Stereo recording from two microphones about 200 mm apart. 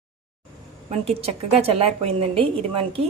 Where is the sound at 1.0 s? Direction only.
30° right (ahead or behind).